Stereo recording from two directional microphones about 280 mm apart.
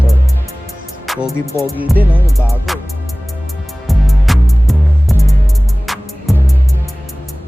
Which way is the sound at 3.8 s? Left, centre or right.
Centre.